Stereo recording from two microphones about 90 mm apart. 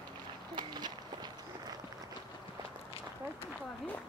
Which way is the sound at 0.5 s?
50° right (ahead or behind).